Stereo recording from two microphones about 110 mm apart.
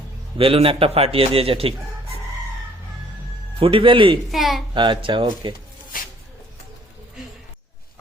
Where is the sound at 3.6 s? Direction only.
55° right (ahead or behind).